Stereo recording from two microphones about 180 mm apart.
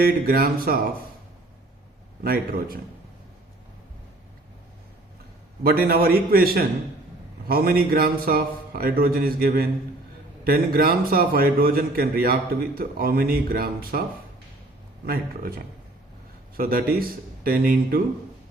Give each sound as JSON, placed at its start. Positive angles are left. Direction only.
{"t": 0.0, "sound": "a man's voice", "side_deg": -55}
{"t": 2.2, "sound": "a man's voice", "side_deg": -55}
{"t": 5.6, "sound": "a man's voice", "side_deg": -55}
{"t": 15.0, "sound": "a man's voice", "side_deg": -55}